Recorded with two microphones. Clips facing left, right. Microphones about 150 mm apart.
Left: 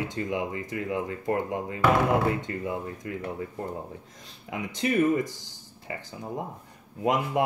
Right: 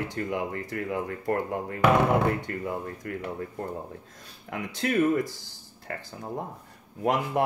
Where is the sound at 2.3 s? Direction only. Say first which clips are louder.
Even; 20° left (ahead or behind).